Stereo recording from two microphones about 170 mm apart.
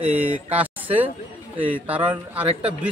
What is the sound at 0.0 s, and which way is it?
A man's voice, 10° right (ahead or behind).